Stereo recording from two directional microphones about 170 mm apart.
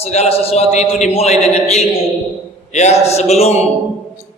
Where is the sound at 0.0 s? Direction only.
40° left (ahead or behind).